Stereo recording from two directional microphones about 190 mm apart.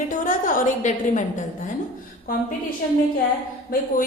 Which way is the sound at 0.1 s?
45° left (ahead or behind).